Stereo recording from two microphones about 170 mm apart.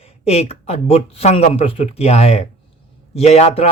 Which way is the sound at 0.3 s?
35° left (ahead or behind).